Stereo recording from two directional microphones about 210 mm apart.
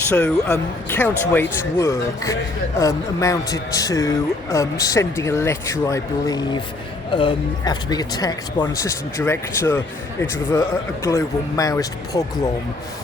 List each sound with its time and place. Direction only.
0.1 s a man's voice: 5° left (ahead or behind)